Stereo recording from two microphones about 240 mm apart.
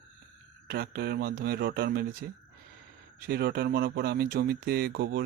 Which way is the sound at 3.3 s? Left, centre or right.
Right.